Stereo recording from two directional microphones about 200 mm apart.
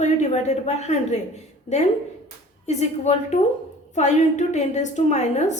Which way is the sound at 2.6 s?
35° left (ahead or behind).